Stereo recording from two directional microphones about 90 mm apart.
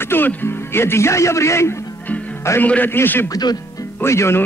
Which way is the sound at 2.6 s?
20° left (ahead or behind).